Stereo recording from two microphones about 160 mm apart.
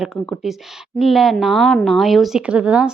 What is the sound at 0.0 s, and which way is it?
A woman's voice, centre (ahead or behind).